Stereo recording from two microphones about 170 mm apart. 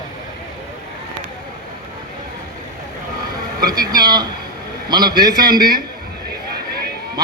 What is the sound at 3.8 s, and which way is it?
A man's voice, 25° right (ahead or behind).